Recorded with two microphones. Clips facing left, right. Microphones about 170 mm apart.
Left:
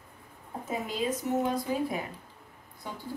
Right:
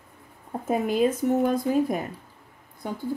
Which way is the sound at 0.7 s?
55° right (ahead or behind).